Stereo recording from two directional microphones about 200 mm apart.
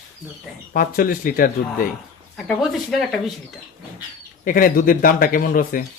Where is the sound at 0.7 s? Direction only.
45° left (ahead or behind).